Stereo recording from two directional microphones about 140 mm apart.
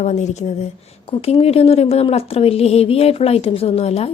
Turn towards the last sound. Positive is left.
turn(degrees=45)  # may be behind; listen again after turning